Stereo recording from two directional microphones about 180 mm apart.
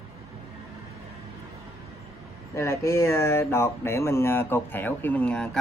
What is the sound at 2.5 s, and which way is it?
Speech, 15° left (ahead or behind).